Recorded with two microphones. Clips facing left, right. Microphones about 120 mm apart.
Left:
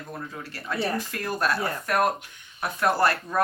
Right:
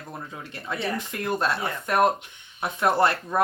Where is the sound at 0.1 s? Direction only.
20° right (ahead or behind).